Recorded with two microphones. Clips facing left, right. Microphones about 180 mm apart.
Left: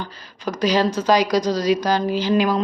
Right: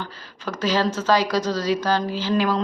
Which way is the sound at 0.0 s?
15° left (ahead or behind).